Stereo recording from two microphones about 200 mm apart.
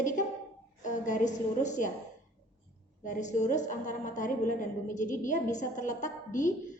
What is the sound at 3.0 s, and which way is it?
A woman's voice, 40° left (ahead or behind).